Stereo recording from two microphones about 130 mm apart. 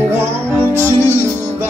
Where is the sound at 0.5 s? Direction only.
15° left (ahead or behind).